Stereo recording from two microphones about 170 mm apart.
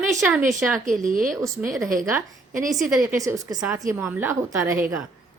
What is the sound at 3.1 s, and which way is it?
A woman's voice, 20° right (ahead or behind).